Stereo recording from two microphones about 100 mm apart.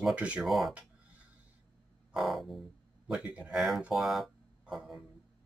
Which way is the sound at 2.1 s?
Centre (ahead or behind).